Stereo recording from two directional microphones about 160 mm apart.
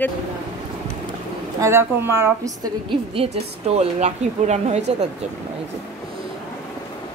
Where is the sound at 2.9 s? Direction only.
40° right (ahead or behind).